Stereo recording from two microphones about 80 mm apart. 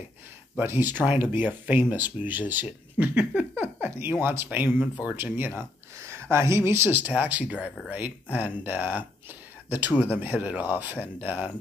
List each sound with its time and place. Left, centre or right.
0.6 s speech: right
5.9 s a sound: right
6.3 s speech: right